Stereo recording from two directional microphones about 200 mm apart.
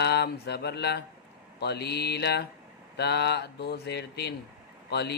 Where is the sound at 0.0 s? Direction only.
55° left (ahead or behind).